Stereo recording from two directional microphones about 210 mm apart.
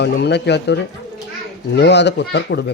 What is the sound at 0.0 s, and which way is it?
Speech, 55° left (ahead or behind).